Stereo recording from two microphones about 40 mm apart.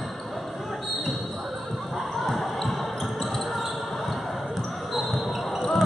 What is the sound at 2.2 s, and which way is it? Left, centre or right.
Basketball bounce, centre.